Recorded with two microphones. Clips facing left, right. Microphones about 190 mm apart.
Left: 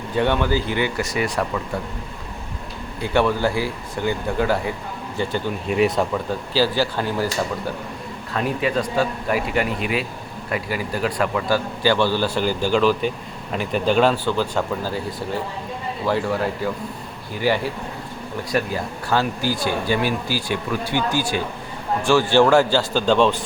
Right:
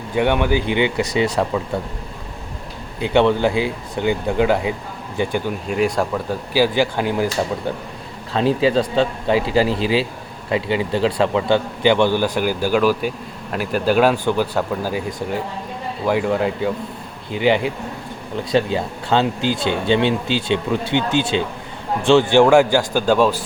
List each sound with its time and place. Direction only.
0.2 s speech: 15° right (ahead or behind)
3.0 s a man's voice: 20° right (ahead or behind)
5.6 s speech: centre (ahead or behind)
6.5 s a man's voice: 15° right (ahead or behind)
8.3 s a man's voice: 30° right (ahead or behind); by 15.0 s 15° right (ahead or behind)
16.0 s a man's voice: 15° right (ahead or behind)